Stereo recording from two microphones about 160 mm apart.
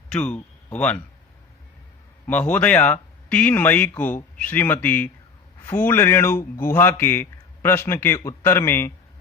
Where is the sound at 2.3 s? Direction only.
10° left (ahead or behind).